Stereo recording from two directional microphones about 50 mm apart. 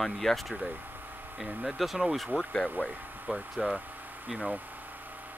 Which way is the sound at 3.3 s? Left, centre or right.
Centre.